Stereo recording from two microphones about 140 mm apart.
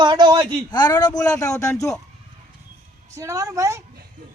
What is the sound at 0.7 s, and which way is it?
Speech, 30° left (ahead or behind).